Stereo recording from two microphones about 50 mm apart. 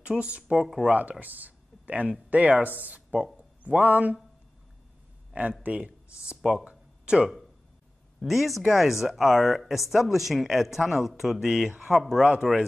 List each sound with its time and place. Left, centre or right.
0.0 s speech: right
0.8 s speech: right
1.2 s a sound: right
2.6 s speech: right
5.3 s speech: right
8.2 s speech: centre